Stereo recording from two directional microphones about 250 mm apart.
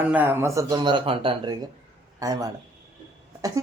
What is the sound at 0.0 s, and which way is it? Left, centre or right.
A man's voice, centre.